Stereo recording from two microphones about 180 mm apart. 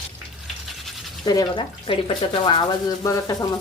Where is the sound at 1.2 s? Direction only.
20° left (ahead or behind).